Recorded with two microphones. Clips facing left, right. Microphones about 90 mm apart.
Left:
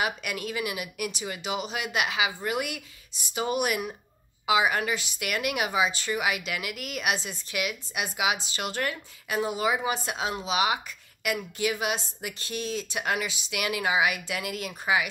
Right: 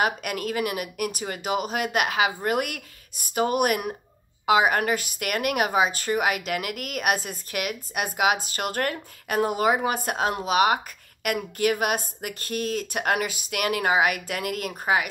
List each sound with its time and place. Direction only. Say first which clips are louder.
0.0 s a woman's voice: right 4 dB; 45° right (ahead or behind)